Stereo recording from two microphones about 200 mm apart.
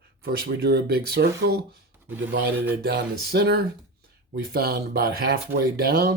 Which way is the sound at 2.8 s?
50° right (ahead or behind).